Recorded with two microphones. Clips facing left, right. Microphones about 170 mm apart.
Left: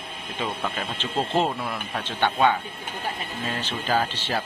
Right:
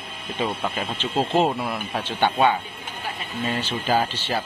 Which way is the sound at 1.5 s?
25° right (ahead or behind).